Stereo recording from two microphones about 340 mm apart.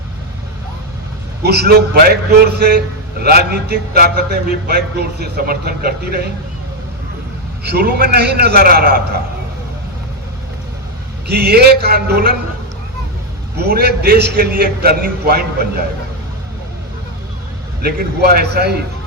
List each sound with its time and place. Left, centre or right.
1.4 s a man's voice: right
7.6 s a man's voice: right
11.3 s a man's voice: right
13.7 s a man's voice: right
17.8 s a man's voice: right